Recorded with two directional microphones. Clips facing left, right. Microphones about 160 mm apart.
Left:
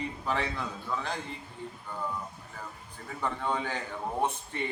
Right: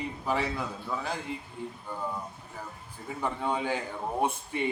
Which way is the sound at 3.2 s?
15° right (ahead or behind).